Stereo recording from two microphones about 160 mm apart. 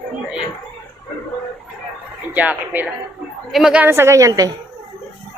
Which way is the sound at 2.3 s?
10° right (ahead or behind).